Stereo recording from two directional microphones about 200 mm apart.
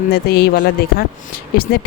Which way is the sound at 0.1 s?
50° left (ahead or behind).